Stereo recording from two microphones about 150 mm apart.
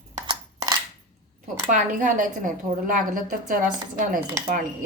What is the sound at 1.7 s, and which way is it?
A woman's voice, 60° right (ahead or behind).